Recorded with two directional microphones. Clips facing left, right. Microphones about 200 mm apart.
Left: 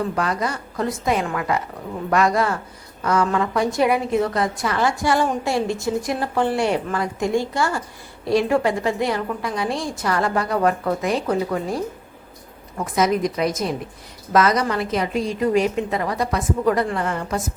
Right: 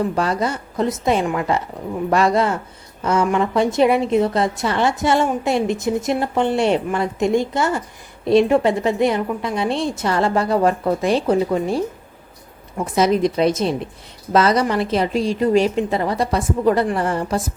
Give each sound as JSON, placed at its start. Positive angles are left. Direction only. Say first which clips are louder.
{"t": 0.2, "sound": "a woman's voice", "louder": "right 3 dB", "side_deg": -30}
{"t": 12.8, "sound": "a woman's voice", "louder": "right 3 dB", "side_deg": -25}